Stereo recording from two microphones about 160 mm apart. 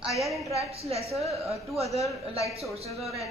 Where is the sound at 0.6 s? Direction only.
40° right (ahead or behind).